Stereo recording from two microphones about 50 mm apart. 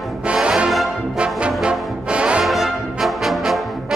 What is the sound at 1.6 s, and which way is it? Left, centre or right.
Brass instrument, centre.